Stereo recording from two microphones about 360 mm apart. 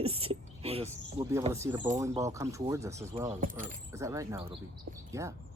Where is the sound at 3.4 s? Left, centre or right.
Right.